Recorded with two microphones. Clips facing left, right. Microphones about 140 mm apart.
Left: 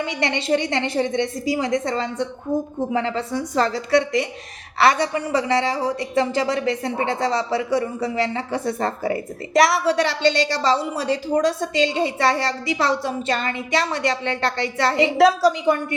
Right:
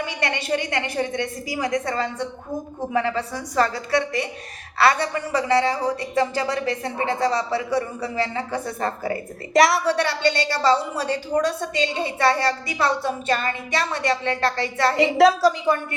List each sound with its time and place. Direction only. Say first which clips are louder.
0.0 s a woman's voice: left 3 dB; 25° left (ahead or behind)
4.8 s a woman's voice: left 2 dB; 20° left (ahead or behind)
9.5 s a woman's voice: even; centre (ahead or behind)
9.8 s a woman's voice: left 2 dB; 25° left (ahead or behind)
15.0 s a woman's voice: even; centre (ahead or behind)
15.6 s a woman's voice: left 2 dB; 20° left (ahead or behind)